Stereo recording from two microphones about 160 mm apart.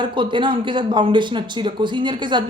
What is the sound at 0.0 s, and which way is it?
A woman's voice, 30° right (ahead or behind).